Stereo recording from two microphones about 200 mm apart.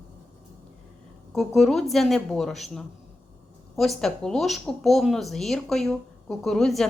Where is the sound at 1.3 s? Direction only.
Centre (ahead or behind).